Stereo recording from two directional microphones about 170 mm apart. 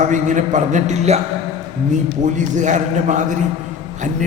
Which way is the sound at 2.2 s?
45° right (ahead or behind).